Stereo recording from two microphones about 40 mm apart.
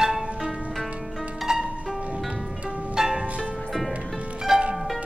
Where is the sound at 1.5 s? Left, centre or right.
Centre.